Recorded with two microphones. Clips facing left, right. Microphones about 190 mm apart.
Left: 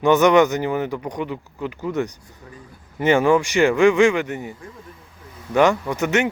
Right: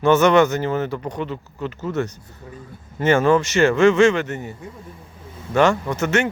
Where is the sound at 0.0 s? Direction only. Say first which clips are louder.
Even; 15° left (ahead or behind).